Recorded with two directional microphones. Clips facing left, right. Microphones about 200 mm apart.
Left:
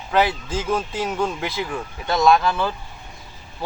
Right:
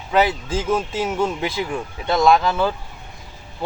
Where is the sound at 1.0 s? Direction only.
5° right (ahead or behind).